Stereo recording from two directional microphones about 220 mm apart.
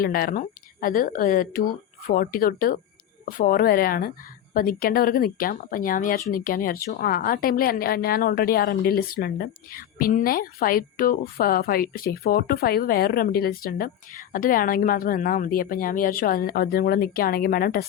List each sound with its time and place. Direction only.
0.0 s a woman's voice: 40° left (ahead or behind)